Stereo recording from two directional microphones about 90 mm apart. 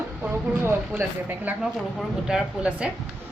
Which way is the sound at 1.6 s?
5° right (ahead or behind).